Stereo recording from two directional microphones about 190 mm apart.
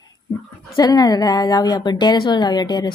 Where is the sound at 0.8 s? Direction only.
20° left (ahead or behind).